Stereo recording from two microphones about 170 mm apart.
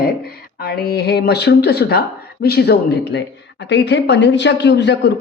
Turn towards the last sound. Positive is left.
turn(degrees=90)